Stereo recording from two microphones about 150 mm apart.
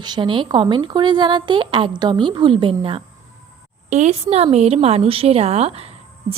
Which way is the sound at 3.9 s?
50° right (ahead or behind).